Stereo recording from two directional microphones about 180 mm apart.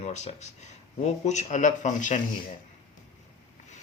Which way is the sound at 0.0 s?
40° left (ahead or behind).